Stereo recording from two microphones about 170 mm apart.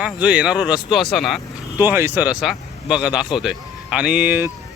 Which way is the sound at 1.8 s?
15° right (ahead or behind).